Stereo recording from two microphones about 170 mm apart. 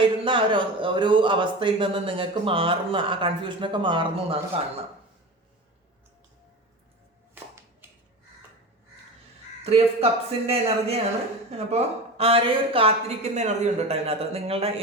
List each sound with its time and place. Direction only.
0.0 s speech: 30° right (ahead or behind)
9.6 s speech: 35° right (ahead or behind)